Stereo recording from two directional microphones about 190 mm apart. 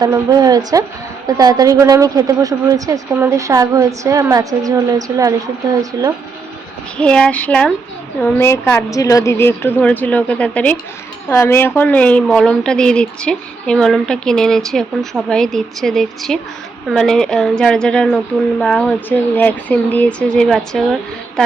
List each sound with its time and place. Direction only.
0.0 s a woman's voice: 20° right (ahead or behind)
6.9 s a woman's voice: 5° left (ahead or behind)